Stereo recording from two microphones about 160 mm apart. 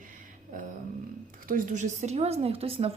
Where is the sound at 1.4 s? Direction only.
55° right (ahead or behind); by 2.9 s 40° right (ahead or behind).